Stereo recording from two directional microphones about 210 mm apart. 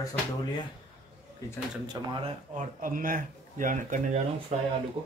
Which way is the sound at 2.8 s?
40° right (ahead or behind).